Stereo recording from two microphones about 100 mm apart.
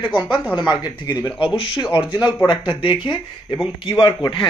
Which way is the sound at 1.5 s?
60° left (ahead or behind).